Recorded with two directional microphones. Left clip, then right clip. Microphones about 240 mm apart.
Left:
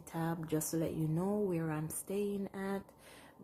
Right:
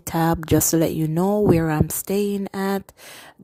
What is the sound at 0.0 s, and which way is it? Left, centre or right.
A woman's voice, right.